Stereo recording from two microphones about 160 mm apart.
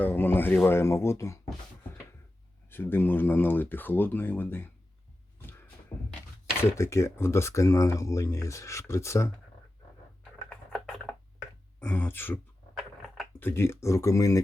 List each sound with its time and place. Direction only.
0.0 s speech: 10° left (ahead or behind)
2.6 s speech: 15° left (ahead or behind)
6.6 s speech: 20° left (ahead or behind)
10.7 s a sound: 5° left (ahead or behind)
11.8 s speech: 10° left (ahead or behind)
13.4 s speech: 15° left (ahead or behind)